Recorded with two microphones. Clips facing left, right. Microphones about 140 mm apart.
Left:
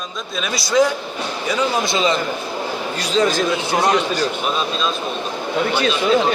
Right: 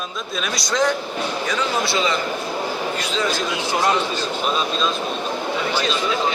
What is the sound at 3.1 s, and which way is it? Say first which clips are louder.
Speech: left 8 dB; 45° left (ahead or behind).